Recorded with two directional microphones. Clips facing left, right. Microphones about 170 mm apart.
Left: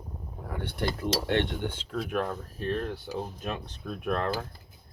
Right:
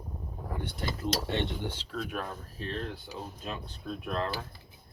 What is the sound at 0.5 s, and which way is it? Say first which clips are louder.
Speech: left 5 dB; 65° left (ahead or behind).